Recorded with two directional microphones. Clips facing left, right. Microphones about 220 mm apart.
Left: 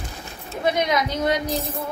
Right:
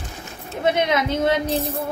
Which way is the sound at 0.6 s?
25° right (ahead or behind).